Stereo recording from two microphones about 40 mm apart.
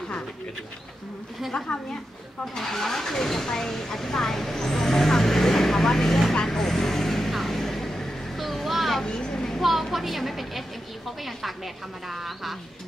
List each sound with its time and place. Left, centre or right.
1.4 s a woman's voice: centre
2.5 s speech: centre
6.3 s vehicle: centre
9.0 s a sound: left
9.6 s a woman's voice: centre